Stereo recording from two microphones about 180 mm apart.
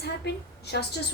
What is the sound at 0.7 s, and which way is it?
Speech, 65° left (ahead or behind).